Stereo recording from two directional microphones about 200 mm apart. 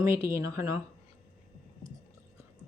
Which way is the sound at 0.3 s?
15° right (ahead or behind).